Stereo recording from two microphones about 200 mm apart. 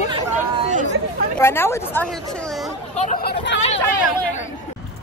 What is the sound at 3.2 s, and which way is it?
Speech, 60° left (ahead or behind).